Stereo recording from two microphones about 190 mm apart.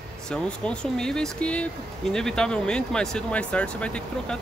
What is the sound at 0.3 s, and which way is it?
Speech, 5° left (ahead or behind).